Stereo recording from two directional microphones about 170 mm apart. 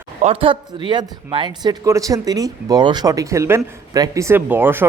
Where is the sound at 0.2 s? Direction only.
35° right (ahead or behind).